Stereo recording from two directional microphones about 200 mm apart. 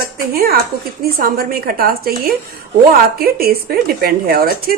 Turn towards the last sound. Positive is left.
turn(degrees=-50)  # may be behind; listen again after turning